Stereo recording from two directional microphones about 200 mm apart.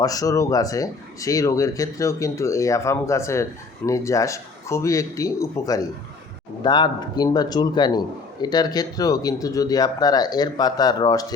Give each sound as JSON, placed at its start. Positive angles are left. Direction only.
{"t": 0.0, "sound": "a man's voice", "side_deg": 20}